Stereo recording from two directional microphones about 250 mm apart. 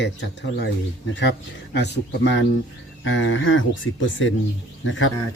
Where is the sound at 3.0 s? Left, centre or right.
Left.